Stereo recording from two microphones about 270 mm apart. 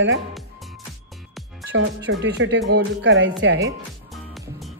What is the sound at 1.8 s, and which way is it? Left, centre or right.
Speech, right.